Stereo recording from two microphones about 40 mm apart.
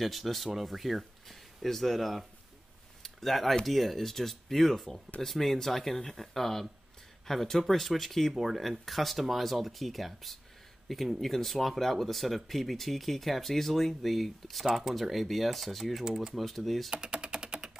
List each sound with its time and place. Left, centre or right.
0.0 s speech: centre
3.0 s a sound: centre
3.6 s speech: centre
15.8 s speech: centre
16.3 s speech: centre
16.9 s typing: right